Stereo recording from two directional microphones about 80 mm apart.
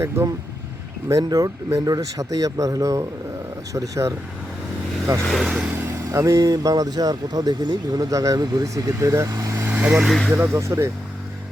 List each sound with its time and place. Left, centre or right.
0.2 s speech: right
5.3 s speech: centre
6.1 s speech: right
8.1 s speech: right
9.6 s vehicle: right
10.3 s speech: right